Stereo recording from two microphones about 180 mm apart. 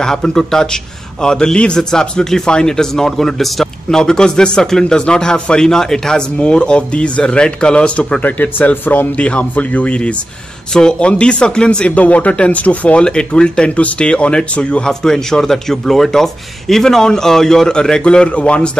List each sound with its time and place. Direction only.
0.0 s a man's voice: 5° left (ahead or behind)